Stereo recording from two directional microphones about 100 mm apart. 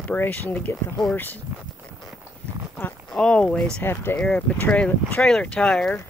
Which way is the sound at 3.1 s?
10° left (ahead or behind).